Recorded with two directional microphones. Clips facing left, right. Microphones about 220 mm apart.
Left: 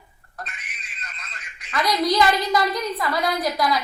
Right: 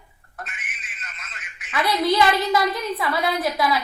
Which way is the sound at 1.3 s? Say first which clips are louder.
Even; 5° right (ahead or behind).